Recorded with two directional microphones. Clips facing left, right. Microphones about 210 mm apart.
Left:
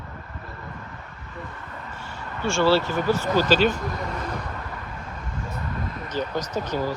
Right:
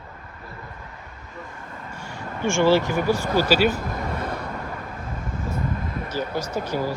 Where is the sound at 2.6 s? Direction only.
15° right (ahead or behind).